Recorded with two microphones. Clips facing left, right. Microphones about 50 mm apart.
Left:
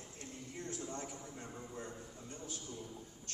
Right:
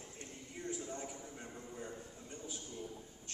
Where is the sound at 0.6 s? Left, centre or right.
Centre.